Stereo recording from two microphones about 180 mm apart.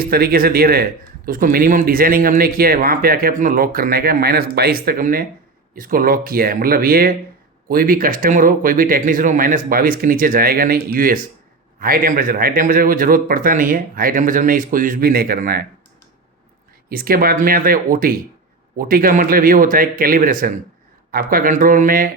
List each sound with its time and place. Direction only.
0.0 s speech: 55° right (ahead or behind)
16.9 s speech: 55° right (ahead or behind)